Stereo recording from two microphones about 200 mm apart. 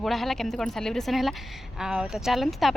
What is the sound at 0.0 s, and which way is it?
Speech, centre (ahead or behind).